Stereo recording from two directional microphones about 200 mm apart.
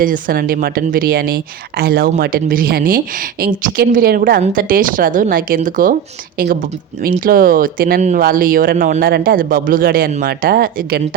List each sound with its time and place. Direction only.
0.0 s speech: 45° right (ahead or behind)